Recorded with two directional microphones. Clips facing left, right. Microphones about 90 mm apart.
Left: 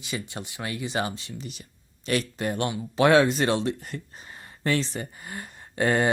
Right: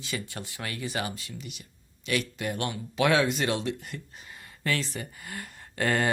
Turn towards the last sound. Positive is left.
turn(degrees=20)  # may be behind; listen again after turning